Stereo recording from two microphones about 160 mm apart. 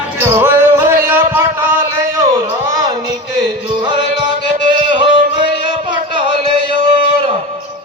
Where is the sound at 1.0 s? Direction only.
15° right (ahead or behind).